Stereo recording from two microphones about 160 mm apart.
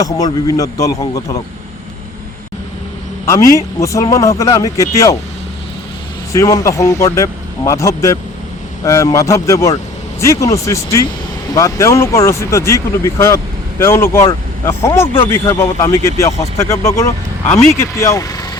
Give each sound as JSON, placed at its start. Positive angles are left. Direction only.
{"t": 0.0, "sound": "a man's voice", "side_deg": 20}
{"t": 3.2, "sound": "a man's voice", "side_deg": 20}
{"t": 6.3, "sound": "a man's voice", "side_deg": 20}